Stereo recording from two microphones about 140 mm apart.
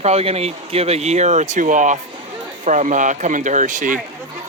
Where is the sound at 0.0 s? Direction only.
50° right (ahead or behind).